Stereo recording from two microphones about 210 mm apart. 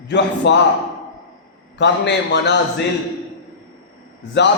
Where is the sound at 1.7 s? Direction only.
55° left (ahead or behind).